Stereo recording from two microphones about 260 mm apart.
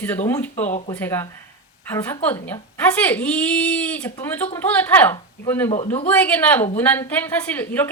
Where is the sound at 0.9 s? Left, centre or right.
Centre.